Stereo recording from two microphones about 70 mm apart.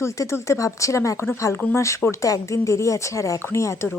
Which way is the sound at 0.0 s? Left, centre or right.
Left.